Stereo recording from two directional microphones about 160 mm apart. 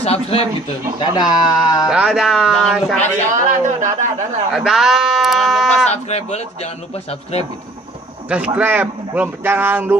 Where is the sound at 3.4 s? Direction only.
50° right (ahead or behind).